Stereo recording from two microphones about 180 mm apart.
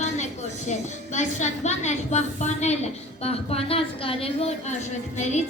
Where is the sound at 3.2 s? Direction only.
35° left (ahead or behind).